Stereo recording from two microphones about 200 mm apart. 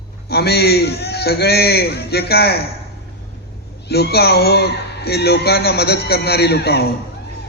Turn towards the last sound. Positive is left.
turn(degrees=55)  # may be behind; listen again after turning